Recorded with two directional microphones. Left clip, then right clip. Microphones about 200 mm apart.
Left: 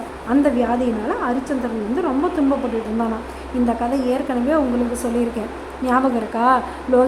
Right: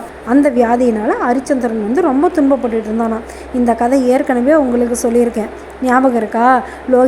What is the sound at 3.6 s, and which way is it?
Speech, 25° right (ahead or behind).